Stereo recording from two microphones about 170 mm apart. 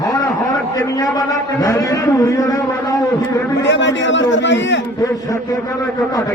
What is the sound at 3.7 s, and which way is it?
A man's voice, 90° left.